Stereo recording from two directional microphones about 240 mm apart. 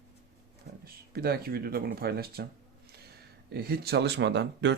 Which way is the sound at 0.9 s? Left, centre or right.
Right.